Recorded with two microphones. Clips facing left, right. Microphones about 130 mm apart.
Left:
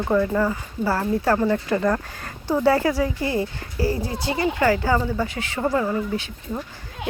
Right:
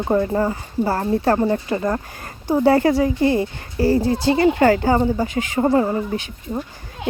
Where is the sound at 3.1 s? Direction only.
25° right (ahead or behind).